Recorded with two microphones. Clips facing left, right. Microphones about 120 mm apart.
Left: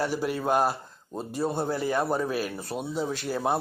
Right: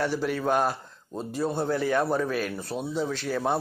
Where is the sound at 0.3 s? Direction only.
10° left (ahead or behind).